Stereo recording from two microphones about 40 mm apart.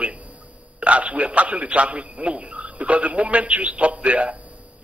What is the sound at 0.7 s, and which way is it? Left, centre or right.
A man's voice, right.